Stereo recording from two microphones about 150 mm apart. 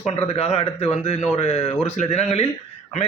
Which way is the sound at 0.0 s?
40° left (ahead or behind).